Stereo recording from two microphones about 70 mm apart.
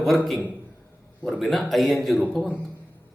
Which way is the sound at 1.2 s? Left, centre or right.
Centre.